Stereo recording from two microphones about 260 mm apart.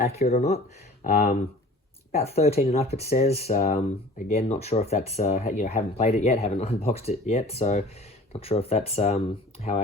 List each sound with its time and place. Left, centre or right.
0.2 s speech: left